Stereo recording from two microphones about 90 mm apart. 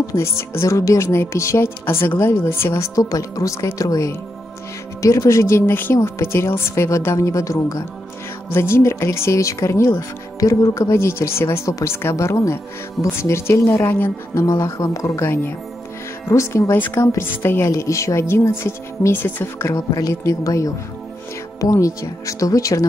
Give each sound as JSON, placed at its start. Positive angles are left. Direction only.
{"t": 0.0, "sound": "speech", "side_deg": 30}
{"t": 3.0, "sound": "speech", "side_deg": 40}
{"t": 15.2, "sound": "speech", "side_deg": 25}
{"t": 16.7, "sound": "speech", "side_deg": 20}
{"t": 17.6, "sound": "speech", "side_deg": 35}